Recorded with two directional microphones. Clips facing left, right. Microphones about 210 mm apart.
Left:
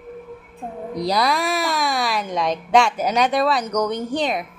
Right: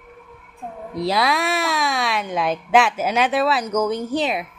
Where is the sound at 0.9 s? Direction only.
Centre (ahead or behind).